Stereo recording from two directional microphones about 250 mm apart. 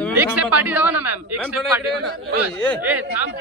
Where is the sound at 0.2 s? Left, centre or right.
Centre.